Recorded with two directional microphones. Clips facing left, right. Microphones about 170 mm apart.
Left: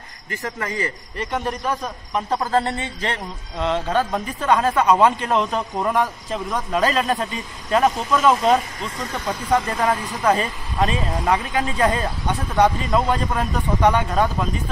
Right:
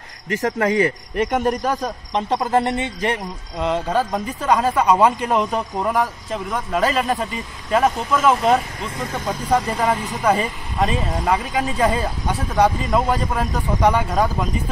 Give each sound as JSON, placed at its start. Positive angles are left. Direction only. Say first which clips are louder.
{"t": 0.4, "sound": "speech", "louder": "right 8 dB", "side_deg": -60}
{"t": 2.1, "sound": "speech", "louder": "right 2 dB", "side_deg": -20}